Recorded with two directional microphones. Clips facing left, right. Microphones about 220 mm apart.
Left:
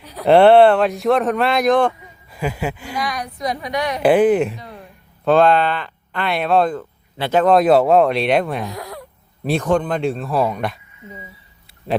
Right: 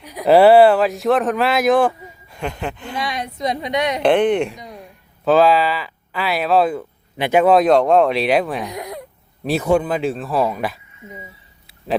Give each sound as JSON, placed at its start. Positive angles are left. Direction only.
{"t": 0.0, "sound": "a sound", "side_deg": -15}
{"t": 0.3, "sound": "speech", "side_deg": -5}
{"t": 2.3, "sound": "speech", "side_deg": 5}
{"t": 3.0, "sound": "a woman's voice", "side_deg": -25}
{"t": 4.0, "sound": "speech", "side_deg": 5}
{"t": 7.5, "sound": "speech", "side_deg": 5}
{"t": 8.7, "sound": "a sound", "side_deg": -20}
{"t": 9.4, "sound": "speech", "side_deg": -5}